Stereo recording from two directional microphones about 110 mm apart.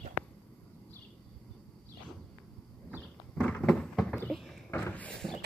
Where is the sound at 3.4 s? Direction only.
10° left (ahead or behind).